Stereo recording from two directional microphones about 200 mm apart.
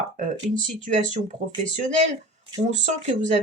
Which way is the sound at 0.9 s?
35° right (ahead or behind).